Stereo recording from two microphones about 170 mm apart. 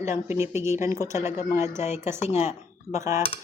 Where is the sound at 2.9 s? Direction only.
15° right (ahead or behind).